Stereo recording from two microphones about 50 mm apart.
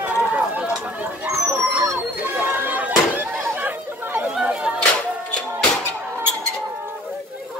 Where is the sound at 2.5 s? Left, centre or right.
Right.